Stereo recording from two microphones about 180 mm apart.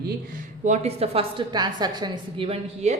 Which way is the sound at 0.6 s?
40° right (ahead or behind).